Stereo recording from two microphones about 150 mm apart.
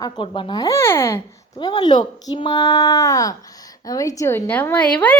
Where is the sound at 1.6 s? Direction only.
30° left (ahead or behind); by 5.1 s 10° left (ahead or behind).